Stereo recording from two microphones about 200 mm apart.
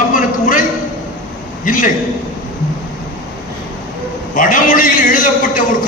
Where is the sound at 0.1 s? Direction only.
40° left (ahead or behind).